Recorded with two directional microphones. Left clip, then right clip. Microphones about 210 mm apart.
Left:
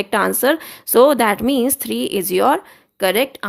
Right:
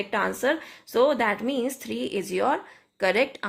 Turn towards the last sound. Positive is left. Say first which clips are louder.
# left 6 dB
turn(degrees=35)  # may be behind; listen again after turning